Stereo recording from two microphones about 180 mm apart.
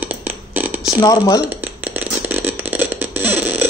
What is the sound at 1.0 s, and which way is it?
Speech, 20° left (ahead or behind).